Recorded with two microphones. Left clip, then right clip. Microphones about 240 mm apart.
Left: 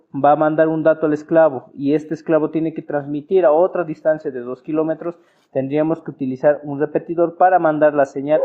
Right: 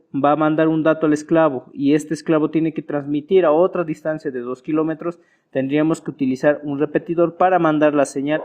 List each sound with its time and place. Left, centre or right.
0.1 s a man's voice: right